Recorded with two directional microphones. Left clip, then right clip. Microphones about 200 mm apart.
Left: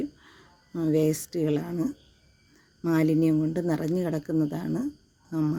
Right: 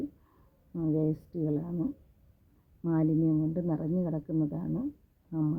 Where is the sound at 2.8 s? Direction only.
40° left (ahead or behind).